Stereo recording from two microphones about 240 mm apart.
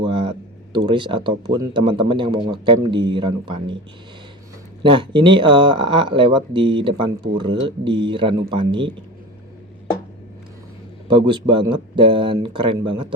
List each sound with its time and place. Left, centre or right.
0.0 s speech: right
4.8 s speech: centre
11.1 s speech: centre